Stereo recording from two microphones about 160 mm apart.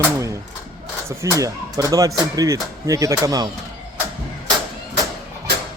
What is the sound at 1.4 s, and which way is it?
Speech, 20° right (ahead or behind).